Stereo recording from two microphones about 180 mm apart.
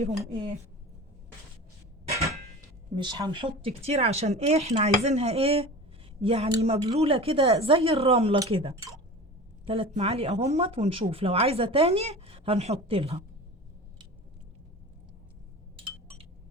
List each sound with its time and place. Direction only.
2.9 s speech: 25° right (ahead or behind)